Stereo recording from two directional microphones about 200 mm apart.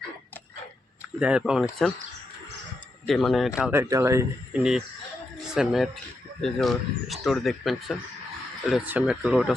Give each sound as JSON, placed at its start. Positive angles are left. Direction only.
{"t": 1.2, "sound": "speech", "side_deg": -5}
{"t": 3.1, "sound": "speech", "side_deg": 0}
{"t": 3.6, "sound": "speech", "side_deg": -10}
{"t": 5.5, "sound": "speech", "side_deg": 0}